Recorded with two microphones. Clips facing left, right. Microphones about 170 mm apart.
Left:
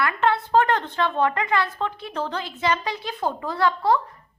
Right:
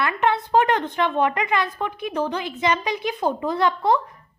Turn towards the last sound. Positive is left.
turn(degrees=-20)  # may be behind; listen again after turning